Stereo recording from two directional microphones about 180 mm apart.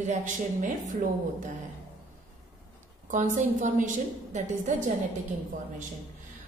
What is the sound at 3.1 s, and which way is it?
A woman's voice, 45° right (ahead or behind).